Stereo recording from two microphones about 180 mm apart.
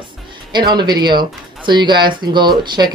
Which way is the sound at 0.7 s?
25° right (ahead or behind).